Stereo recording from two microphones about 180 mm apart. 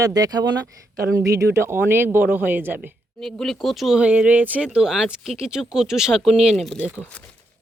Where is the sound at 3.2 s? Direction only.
Centre (ahead or behind).